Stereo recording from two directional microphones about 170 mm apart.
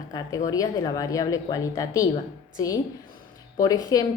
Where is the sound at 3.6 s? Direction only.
20° left (ahead or behind).